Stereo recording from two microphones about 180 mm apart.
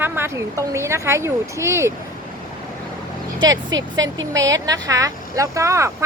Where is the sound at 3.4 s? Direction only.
90° right.